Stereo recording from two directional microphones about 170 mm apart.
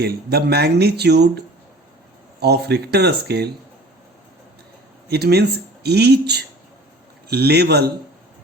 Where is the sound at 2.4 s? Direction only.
75° right (ahead or behind).